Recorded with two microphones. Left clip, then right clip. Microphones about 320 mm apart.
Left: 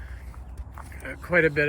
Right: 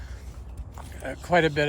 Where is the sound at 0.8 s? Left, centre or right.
Centre.